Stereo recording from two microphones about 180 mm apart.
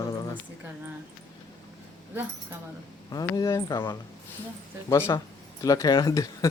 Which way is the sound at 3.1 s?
20° left (ahead or behind).